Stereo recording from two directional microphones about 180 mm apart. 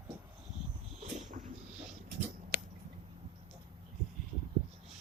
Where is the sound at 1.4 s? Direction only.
45° right (ahead or behind).